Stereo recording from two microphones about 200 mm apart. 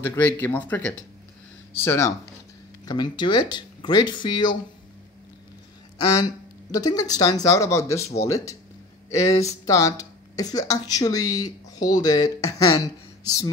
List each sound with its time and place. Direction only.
0.0 s speech: 10° left (ahead or behind)
1.9 s speech: 15° left (ahead or behind)
6.1 s speech: 20° left (ahead or behind)